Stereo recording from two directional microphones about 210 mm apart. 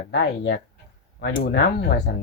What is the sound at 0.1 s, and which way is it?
Speech, 50° left (ahead or behind).